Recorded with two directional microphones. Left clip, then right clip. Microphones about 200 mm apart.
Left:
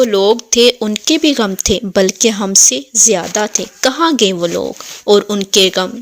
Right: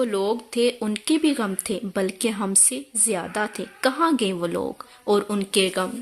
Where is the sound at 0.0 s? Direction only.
35° left (ahead or behind).